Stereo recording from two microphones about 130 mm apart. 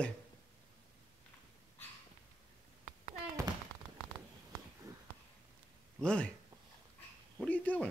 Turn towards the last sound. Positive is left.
turn(degrees=10)  # may be behind; listen again after turning